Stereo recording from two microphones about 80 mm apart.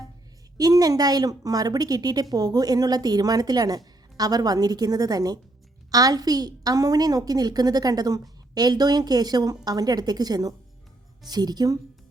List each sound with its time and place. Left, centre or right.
0.5 s a woman's voice: right